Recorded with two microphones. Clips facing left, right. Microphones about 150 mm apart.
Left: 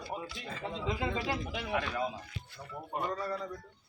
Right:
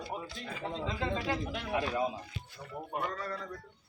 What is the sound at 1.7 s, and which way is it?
Speech, 25° right (ahead or behind).